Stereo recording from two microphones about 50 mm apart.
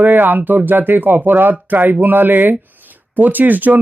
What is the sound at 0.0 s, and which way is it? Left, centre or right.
Speech, right.